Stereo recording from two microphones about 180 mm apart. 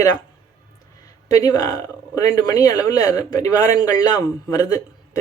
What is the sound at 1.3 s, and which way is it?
Speech, 20° left (ahead or behind).